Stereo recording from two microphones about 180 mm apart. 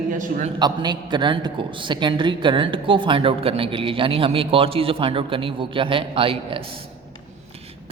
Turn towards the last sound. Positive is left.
turn(degrees=-30)  # may be behind; listen again after turning